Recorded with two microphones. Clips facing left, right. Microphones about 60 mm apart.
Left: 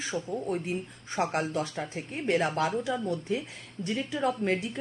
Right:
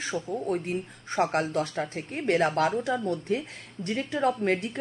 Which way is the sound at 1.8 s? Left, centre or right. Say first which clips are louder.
Right 4 dB; centre.